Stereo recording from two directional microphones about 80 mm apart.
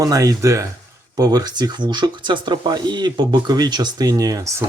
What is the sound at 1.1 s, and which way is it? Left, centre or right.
Speech, right.